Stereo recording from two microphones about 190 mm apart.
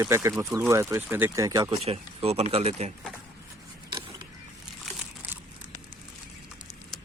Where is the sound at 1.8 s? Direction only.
30° right (ahead or behind).